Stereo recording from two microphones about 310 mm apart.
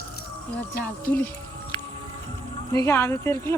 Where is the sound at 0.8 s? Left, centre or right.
Centre.